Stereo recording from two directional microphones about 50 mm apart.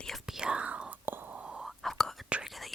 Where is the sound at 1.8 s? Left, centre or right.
Centre.